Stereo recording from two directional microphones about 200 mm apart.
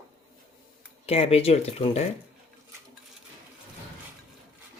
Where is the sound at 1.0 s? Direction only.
30° left (ahead or behind).